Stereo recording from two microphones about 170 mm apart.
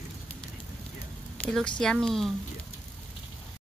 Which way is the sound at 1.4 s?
5° left (ahead or behind).